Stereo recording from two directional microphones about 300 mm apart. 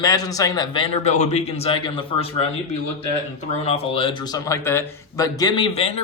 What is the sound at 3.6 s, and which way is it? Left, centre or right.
A man's voice, centre.